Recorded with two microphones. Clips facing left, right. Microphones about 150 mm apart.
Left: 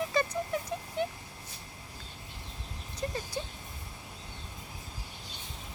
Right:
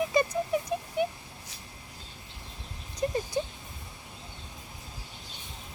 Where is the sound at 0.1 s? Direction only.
15° right (ahead or behind).